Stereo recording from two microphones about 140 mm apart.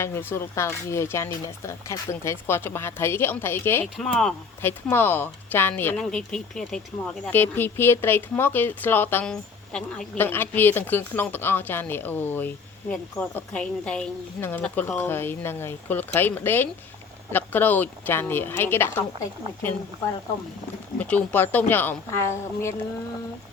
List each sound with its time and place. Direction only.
0.0 s speech: 15° left (ahead or behind)
3.9 s speech: centre (ahead or behind)
4.6 s speech: 15° left (ahead or behind)
21.0 s speech: 10° left (ahead or behind)